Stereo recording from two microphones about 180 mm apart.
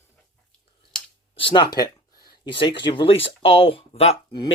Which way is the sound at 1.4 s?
25° left (ahead or behind).